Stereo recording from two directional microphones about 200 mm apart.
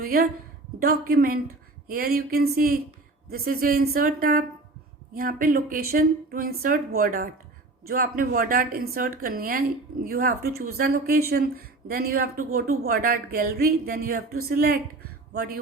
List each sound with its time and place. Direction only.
0.0 s speech: 45° right (ahead or behind)